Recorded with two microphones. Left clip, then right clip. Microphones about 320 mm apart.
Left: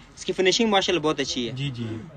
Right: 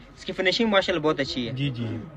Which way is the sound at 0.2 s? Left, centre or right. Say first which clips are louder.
Left 2 dB; centre.